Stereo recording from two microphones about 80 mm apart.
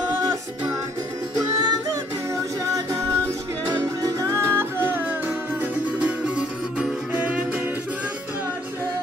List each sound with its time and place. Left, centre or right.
1.3 s music: right
2.7 s music: right; by 7.6 s centre